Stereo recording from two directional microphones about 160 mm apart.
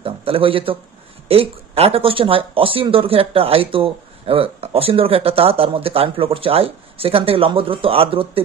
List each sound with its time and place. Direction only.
0.0 s speech: 35° right (ahead or behind)